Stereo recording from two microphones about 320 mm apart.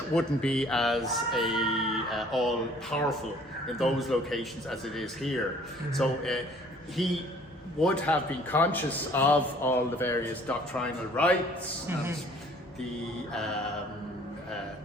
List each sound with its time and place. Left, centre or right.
0.1 s speech: centre